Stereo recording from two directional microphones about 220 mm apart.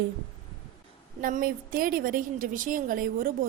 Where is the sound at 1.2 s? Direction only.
40° right (ahead or behind).